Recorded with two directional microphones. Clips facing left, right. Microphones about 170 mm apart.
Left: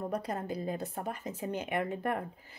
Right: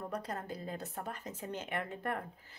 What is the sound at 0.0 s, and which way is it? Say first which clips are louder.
Speech: left 5 dB; 15° left (ahead or behind).